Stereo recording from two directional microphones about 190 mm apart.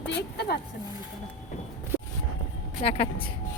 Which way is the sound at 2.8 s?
30° left (ahead or behind).